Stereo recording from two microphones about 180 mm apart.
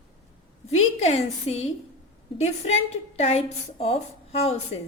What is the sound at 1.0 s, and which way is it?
Speech, 35° left (ahead or behind).